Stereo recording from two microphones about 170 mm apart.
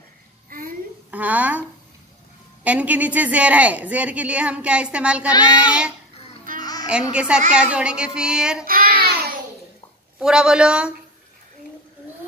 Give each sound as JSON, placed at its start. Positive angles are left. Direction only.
{"t": 0.5, "sound": "a sound", "side_deg": -55}
{"t": 1.1, "sound": "speech", "side_deg": -10}
{"t": 2.6, "sound": "speech", "side_deg": -10}
{"t": 6.6, "sound": "music", "side_deg": 20}
{"t": 6.9, "sound": "speech", "side_deg": -5}
{"t": 8.6, "sound": "child singing", "side_deg": -60}
{"t": 10.1, "sound": "speech", "side_deg": -5}